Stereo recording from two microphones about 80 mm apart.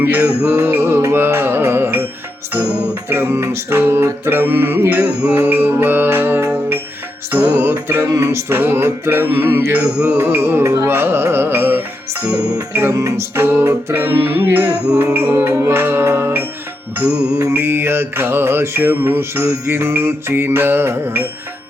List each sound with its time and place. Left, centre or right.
0.0 s mantra: right
0.5 s music: right
3.1 s music: right
5.3 s mantra: right
17.5 s mantra: right